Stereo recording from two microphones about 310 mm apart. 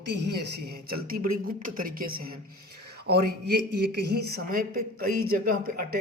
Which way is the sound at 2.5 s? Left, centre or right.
Right.